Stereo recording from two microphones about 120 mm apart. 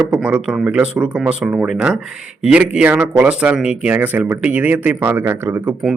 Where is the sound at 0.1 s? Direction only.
10° right (ahead or behind).